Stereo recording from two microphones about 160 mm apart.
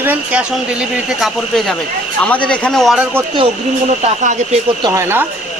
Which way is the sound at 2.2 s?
10° left (ahead or behind).